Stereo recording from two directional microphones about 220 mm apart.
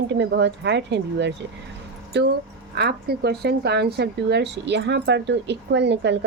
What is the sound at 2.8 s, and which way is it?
Speech, 45° right (ahead or behind).